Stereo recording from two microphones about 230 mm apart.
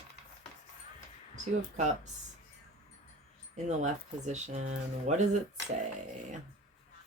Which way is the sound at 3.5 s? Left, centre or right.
Right.